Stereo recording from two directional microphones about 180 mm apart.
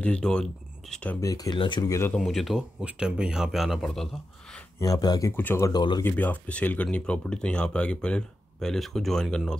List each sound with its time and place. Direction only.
0.0 s speech: 5° left (ahead or behind)
1.2 s speech: 20° left (ahead or behind)
2.1 s speech: centre (ahead or behind)
4.7 s speech: 20° left (ahead or behind)
5.7 s speech: 25° left (ahead or behind)
6.0 s speech: 10° left (ahead or behind)